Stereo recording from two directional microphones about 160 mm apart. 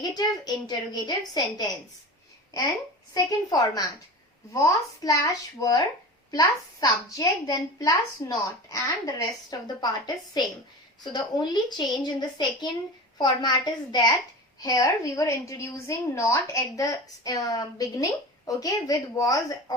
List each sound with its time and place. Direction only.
0.0 s a woman's voice: 25° left (ahead or behind)
11.0 s a woman's voice: 25° left (ahead or behind)